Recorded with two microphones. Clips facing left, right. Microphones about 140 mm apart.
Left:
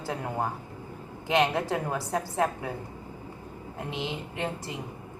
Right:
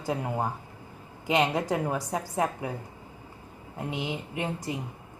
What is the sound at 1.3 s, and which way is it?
A woman's voice, 15° right (ahead or behind).